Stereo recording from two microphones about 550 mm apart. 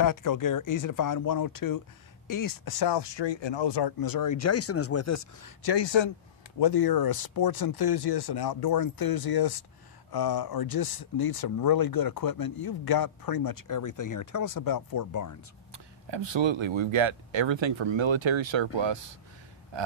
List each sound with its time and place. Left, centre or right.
0.0 s speech: left
5.7 s speech: left
15.7 s speech: right